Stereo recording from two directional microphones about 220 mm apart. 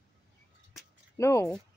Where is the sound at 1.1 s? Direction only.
10° left (ahead or behind).